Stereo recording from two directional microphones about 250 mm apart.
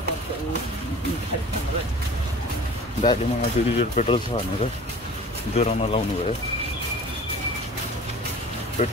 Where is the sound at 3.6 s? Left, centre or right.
Left.